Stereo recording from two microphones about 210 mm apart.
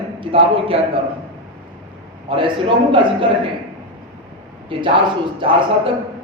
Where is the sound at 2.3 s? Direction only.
25° right (ahead or behind).